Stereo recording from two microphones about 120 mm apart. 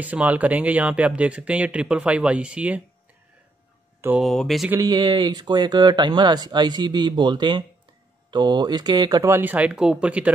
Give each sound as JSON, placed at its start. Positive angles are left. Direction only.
{"t": 0.0, "sound": "speech", "side_deg": -15}
{"t": 4.2, "sound": "speech", "side_deg": 0}
{"t": 4.8, "sound": "speech", "side_deg": -35}
{"t": 9.3, "sound": "speech", "side_deg": -15}